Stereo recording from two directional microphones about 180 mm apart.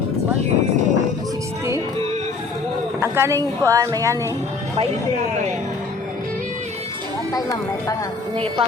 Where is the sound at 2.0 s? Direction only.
35° right (ahead or behind).